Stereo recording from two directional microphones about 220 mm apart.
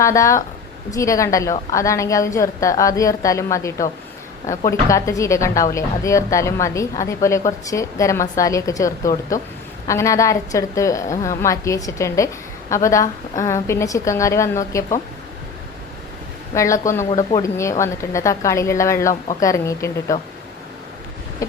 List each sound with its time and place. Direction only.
0.0 s a woman's voice: 15° left (ahead or behind)
16.6 s a woman's voice: 15° left (ahead or behind)
17.1 s speech: 25° left (ahead or behind)
17.4 s a woman's voice: 15° left (ahead or behind)